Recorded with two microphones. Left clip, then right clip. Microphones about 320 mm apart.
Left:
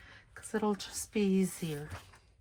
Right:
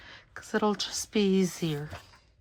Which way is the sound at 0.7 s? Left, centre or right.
Centre.